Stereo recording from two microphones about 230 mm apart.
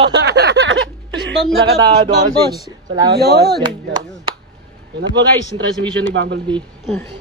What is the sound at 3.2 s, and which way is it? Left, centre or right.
Speech, right.